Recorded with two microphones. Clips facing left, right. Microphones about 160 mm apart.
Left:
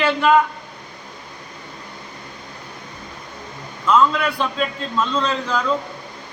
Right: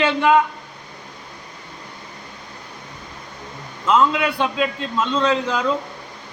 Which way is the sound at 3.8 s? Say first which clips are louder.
Even; 20° right (ahead or behind).